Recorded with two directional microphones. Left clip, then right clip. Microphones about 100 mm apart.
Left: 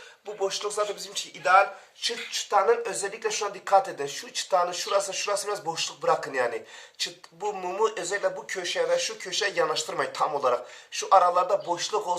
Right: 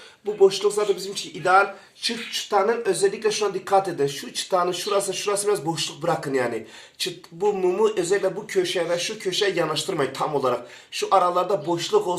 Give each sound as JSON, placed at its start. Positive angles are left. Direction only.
{"t": 0.3, "sound": "speech", "side_deg": -25}
{"t": 2.0, "sound": "speech", "side_deg": 0}
{"t": 7.6, "sound": "speech", "side_deg": -10}